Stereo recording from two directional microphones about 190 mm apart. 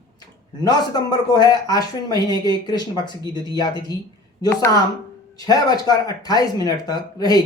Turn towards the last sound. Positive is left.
turn(degrees=20)  # may be behind; listen again after turning